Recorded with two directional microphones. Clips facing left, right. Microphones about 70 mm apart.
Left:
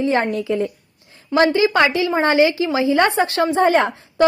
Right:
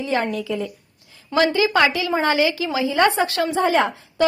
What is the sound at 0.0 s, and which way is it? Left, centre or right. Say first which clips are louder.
A woman's voice: left 4 dB; left.